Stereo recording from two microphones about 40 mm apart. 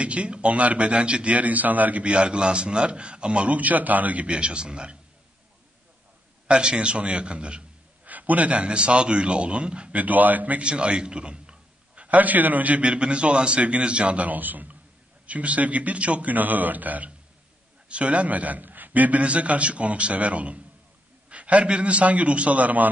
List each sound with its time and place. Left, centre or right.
0.0 s a man's voice: right
2.1 s a man's voice: right
4.3 s a man's voice: right
6.4 s a man's voice: right
8.1 s a man's voice: right
9.9 s speech: right
10.6 s a sound: right
12.2 s a man's voice: right
15.2 s a man's voice: right
17.8 s a man's voice: right